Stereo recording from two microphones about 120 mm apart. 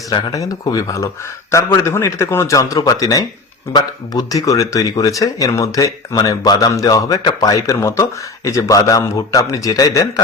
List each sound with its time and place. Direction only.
0.1 s speech: 35° left (ahead or behind)